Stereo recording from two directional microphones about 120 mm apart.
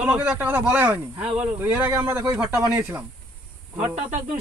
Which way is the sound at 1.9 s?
30° right (ahead or behind).